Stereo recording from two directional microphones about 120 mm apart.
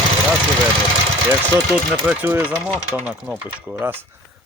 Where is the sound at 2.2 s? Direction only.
20° right (ahead or behind).